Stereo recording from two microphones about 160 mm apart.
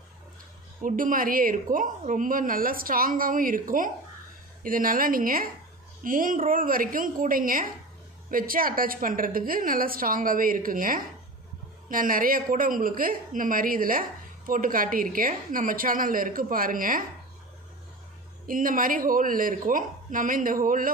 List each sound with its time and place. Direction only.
0.8 s a woman's voice: 60° right (ahead or behind)
18.5 s a woman's voice: 60° right (ahead or behind)